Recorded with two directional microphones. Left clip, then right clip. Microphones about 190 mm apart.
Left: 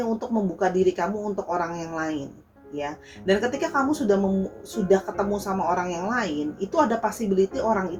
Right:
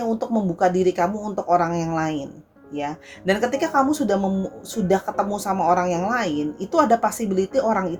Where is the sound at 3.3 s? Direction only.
55° right (ahead or behind).